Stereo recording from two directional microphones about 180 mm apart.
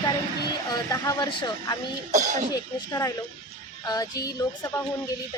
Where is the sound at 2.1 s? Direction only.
40° right (ahead or behind).